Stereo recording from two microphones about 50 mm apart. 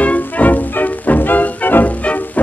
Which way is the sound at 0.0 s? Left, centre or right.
Left.